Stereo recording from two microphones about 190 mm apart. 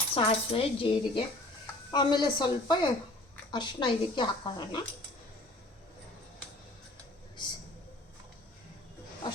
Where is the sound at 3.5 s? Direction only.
25° left (ahead or behind).